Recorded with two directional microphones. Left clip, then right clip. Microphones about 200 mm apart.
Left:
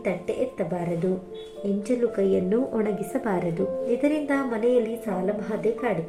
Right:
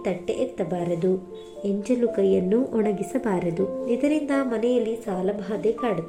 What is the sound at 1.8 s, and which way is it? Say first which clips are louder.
A woman's voice: right 2 dB; 35° right (ahead or behind).